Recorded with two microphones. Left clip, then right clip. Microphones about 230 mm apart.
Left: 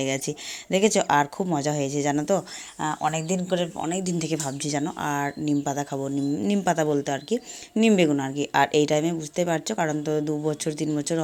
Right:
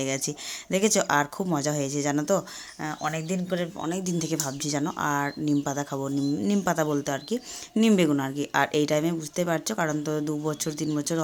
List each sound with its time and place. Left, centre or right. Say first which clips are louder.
0.0 s speech: left 2 dB; centre